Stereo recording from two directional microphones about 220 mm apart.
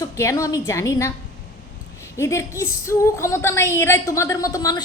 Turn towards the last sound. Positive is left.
turn(degrees=15)  # may be behind; listen again after turning